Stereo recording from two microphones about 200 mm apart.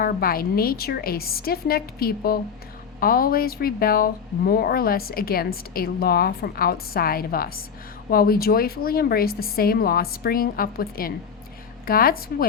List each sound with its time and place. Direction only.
0.0 s speech: 45° left (ahead or behind)